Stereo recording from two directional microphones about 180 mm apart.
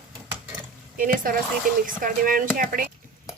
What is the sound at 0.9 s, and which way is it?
A woman's voice, 50° right (ahead or behind).